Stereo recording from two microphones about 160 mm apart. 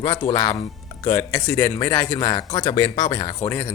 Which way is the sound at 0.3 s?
35° left (ahead or behind).